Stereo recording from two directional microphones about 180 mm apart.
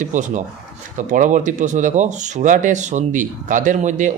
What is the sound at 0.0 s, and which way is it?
Speech, 45° right (ahead or behind).